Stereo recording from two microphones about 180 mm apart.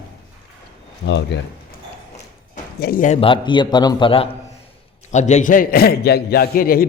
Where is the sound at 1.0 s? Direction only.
75° left (ahead or behind).